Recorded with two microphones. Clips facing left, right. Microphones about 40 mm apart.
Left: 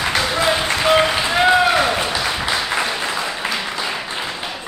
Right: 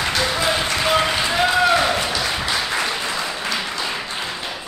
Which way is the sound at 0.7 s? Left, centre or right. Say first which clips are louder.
Left 5 dB; centre.